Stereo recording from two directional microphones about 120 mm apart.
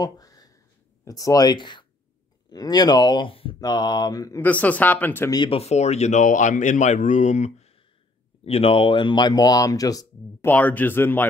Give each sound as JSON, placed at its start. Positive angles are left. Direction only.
{"t": 0.0, "sound": "a sound", "side_deg": 30}
{"t": 1.0, "sound": "speech", "side_deg": 30}
{"t": 3.6, "sound": "speech", "side_deg": 35}
{"t": 4.4, "sound": "speech", "side_deg": 15}
{"t": 5.3, "sound": "speech", "side_deg": 40}
{"t": 5.6, "sound": "speech", "side_deg": 65}
{"t": 8.5, "sound": "speech", "side_deg": 55}
{"t": 10.4, "sound": "speech", "side_deg": 15}